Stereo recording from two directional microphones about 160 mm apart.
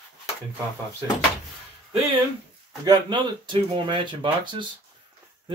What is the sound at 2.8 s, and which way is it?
Speech, 30° right (ahead or behind).